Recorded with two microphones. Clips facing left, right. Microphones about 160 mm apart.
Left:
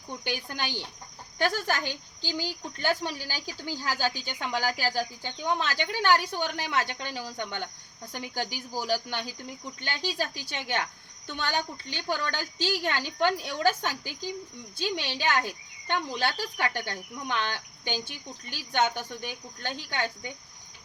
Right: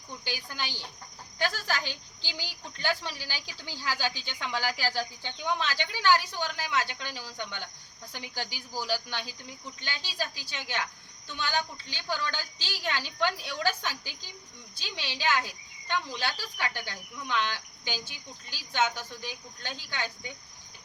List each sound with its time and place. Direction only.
0.3 s speech: 55° left (ahead or behind)